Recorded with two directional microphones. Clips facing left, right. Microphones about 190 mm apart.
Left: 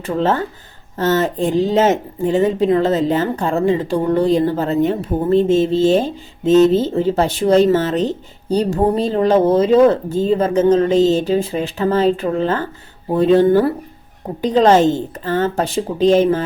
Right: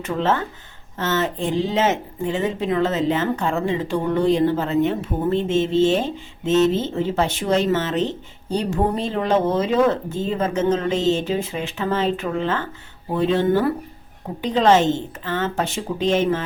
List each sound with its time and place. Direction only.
0.0 s speech: 40° left (ahead or behind)